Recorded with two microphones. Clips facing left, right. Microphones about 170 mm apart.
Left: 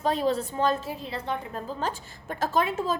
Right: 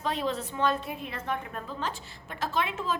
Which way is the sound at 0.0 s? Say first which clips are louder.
Left 5 dB; 40° left (ahead or behind).